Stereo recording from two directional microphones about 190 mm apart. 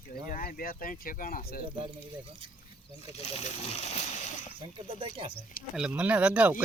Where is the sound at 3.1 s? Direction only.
35° left (ahead or behind).